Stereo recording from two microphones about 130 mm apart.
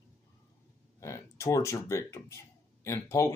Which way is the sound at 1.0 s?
20° left (ahead or behind).